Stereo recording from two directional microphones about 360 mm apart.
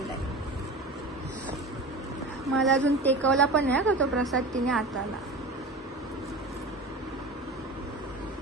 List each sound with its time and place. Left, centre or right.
2.4 s a woman's voice: centre